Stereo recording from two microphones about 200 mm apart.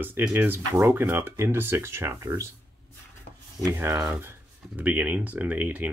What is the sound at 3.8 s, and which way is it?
Speech, 10° right (ahead or behind).